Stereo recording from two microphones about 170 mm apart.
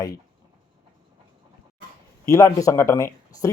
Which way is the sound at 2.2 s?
20° left (ahead or behind).